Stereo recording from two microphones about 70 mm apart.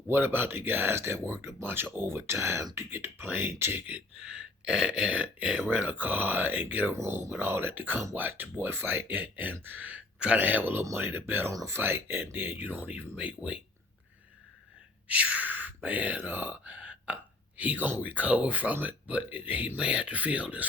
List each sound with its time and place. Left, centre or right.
0.1 s speech: right
3.9 s speech: centre
6.9 s speech: right; by 13.6 s centre
15.0 s speech: centre